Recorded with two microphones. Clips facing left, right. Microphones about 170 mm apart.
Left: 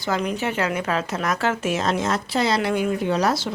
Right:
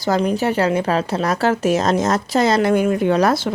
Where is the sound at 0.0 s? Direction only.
35° right (ahead or behind).